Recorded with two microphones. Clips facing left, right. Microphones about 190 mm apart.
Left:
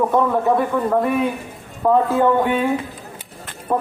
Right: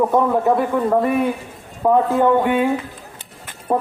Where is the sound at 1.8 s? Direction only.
15° right (ahead or behind).